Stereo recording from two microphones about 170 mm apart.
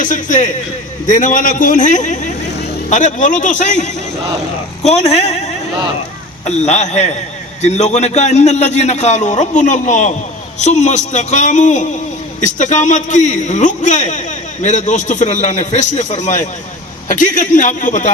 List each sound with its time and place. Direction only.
0.0 s a man's voice: 50° left (ahead or behind)
6.4 s a man's voice: 40° left (ahead or behind)